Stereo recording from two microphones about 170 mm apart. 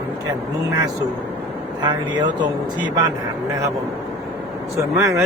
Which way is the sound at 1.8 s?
25° right (ahead or behind).